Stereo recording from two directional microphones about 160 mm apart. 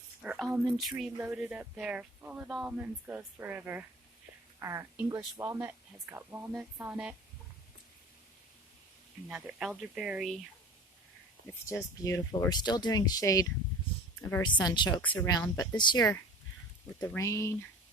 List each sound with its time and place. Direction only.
0.2 s speech: centre (ahead or behind)
9.3 s speech: 5° right (ahead or behind)
11.6 s speech: 15° left (ahead or behind)
14.4 s speech: 30° left (ahead or behind)
15.0 s speech: 10° left (ahead or behind)
15.3 s speech: 25° left (ahead or behind)
17.0 s speech: 15° left (ahead or behind)